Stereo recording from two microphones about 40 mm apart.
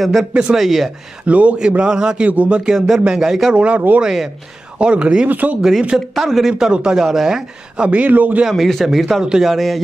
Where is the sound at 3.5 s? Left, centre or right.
Right.